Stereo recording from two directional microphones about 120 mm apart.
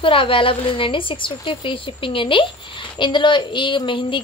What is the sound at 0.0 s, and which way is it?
A woman's voice, 50° left (ahead or behind).